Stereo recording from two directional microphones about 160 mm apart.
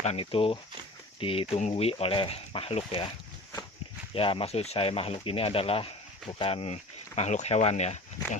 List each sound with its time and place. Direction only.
0.0 s speech: 40° left (ahead or behind)
4.1 s speech: 35° left (ahead or behind)